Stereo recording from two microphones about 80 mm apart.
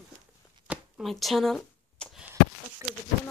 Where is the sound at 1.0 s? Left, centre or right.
Centre.